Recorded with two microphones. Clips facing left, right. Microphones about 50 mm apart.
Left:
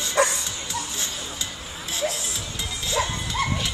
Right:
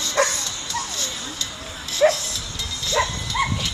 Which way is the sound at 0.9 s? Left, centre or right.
Centre.